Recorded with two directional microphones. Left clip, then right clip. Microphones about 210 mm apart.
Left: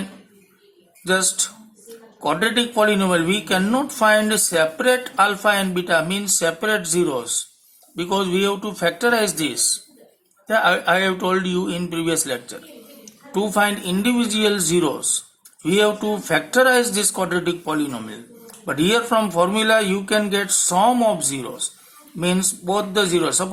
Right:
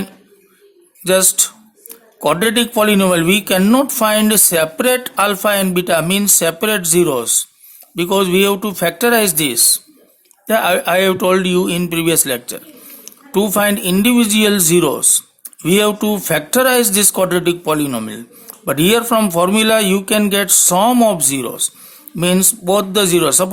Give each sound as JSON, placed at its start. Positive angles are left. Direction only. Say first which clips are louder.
{"t": 1.0, "sound": "speech", "louder": "right 6 dB", "side_deg": -50}